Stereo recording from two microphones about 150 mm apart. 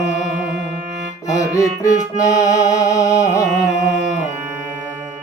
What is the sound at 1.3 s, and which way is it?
Music, 25° left (ahead or behind).